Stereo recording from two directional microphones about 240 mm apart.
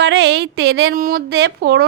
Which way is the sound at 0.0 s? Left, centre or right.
Right.